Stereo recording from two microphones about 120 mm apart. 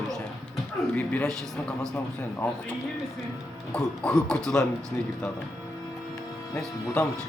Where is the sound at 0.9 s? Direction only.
10° left (ahead or behind).